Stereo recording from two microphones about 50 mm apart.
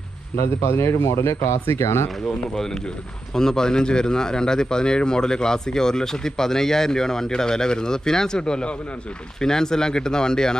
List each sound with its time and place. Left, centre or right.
0.7 s speech: left
2.0 s speech: centre